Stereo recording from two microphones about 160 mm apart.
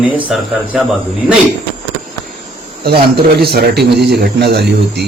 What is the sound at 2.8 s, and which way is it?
A man's voice, 75° right (ahead or behind).